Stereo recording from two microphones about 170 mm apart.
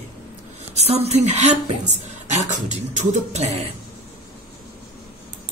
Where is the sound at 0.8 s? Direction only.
40° right (ahead or behind).